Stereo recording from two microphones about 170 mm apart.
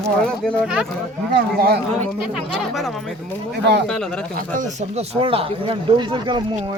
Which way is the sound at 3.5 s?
75° right (ahead or behind).